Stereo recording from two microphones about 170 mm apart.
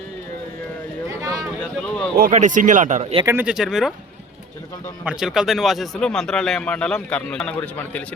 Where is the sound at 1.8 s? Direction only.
5° left (ahead or behind).